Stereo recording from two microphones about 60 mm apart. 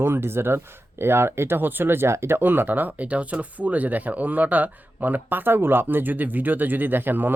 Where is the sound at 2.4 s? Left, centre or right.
Right.